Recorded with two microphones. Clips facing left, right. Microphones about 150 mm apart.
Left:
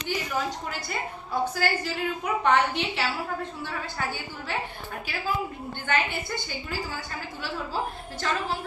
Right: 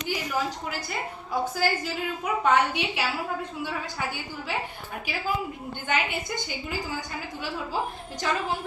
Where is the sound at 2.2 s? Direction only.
10° right (ahead or behind).